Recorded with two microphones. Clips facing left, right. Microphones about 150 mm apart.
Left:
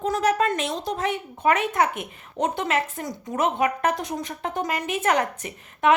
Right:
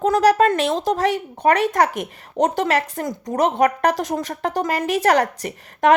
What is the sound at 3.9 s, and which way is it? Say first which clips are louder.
Speech: right 5 dB; 90° right.